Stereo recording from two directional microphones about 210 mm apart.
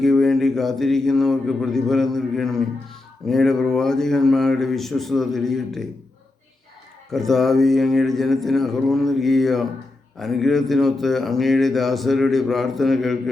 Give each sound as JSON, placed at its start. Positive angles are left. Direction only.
{"t": 0.0, "sound": "speech", "side_deg": 0}
{"t": 7.1, "sound": "speech", "side_deg": 0}